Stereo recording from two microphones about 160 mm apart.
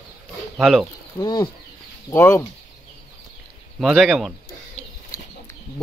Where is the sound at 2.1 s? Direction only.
15° left (ahead or behind).